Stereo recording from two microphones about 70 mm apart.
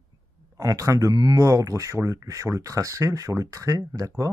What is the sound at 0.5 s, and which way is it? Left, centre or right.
Speech, right.